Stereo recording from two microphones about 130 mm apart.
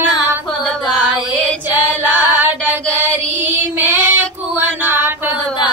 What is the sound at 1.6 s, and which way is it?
Female singing, 15° right (ahead or behind).